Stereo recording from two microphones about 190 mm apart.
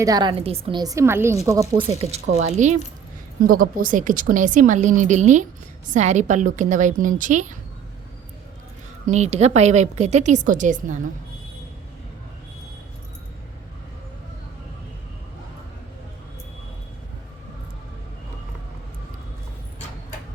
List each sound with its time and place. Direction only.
0.0 s a woman's voice: 20° right (ahead or behind)
2.0 s a woman's voice: 35° right (ahead or behind)
3.4 s a woman's voice: 50° right (ahead or behind)
9.0 s a woman's voice: 35° right (ahead or behind)